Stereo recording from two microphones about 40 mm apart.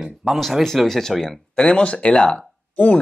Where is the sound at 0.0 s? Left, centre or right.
Centre.